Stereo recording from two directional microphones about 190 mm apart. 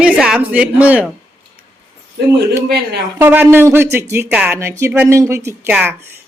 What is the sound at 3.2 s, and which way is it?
A woman's voice, 10° right (ahead or behind).